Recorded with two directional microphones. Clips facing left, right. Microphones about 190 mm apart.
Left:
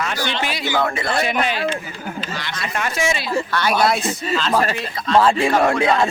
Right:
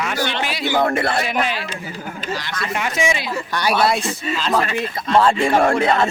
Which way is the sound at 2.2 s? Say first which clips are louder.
Right 4 dB; 45° right (ahead or behind).